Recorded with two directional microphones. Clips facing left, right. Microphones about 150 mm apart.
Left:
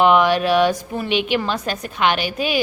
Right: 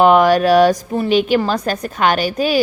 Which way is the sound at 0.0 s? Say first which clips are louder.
Right 4 dB; 40° right (ahead or behind).